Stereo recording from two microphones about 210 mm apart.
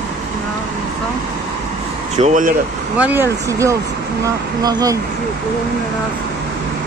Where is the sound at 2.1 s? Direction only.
35° right (ahead or behind).